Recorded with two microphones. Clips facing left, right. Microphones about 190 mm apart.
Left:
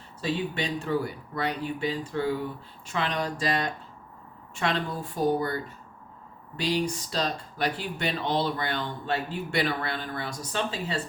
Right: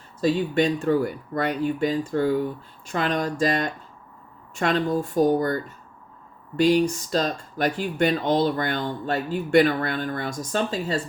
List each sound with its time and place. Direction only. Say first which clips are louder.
0.2 s speech: right 8 dB; 45° right (ahead or behind)